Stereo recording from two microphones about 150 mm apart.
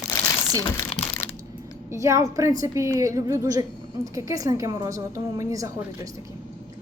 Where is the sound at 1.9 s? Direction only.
20° right (ahead or behind).